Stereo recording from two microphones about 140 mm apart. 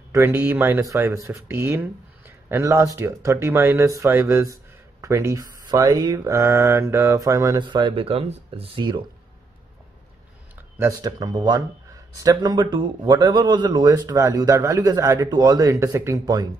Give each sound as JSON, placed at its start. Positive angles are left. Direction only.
{"t": 0.1, "sound": "speech", "side_deg": -20}
{"t": 10.8, "sound": "speech", "side_deg": -25}